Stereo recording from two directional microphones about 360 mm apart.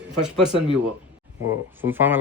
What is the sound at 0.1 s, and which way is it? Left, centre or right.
Speech, centre.